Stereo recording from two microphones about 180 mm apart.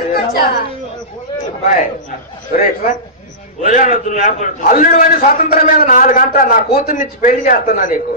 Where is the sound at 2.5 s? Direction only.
45° left (ahead or behind).